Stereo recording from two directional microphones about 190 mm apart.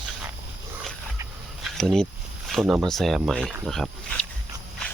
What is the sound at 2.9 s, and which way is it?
Speech, centre (ahead or behind).